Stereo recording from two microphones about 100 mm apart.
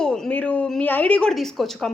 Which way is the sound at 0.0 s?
5° left (ahead or behind).